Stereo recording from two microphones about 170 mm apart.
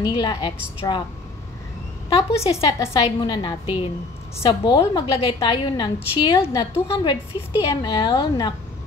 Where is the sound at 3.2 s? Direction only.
30° left (ahead or behind).